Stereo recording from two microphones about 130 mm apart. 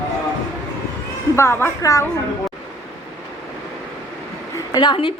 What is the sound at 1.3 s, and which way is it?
Speech, 20° left (ahead or behind).